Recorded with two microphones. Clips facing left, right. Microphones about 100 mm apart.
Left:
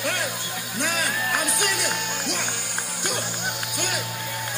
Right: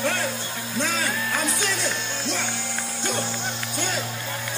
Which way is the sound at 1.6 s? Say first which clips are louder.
Left 1 dB; 15° left (ahead or behind).